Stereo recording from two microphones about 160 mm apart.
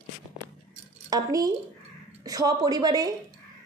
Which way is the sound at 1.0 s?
25° right (ahead or behind).